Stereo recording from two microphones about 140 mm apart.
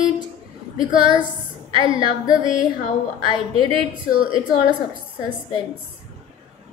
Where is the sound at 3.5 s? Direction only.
40° right (ahead or behind).